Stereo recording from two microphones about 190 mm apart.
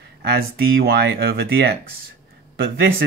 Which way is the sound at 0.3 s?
55° right (ahead or behind).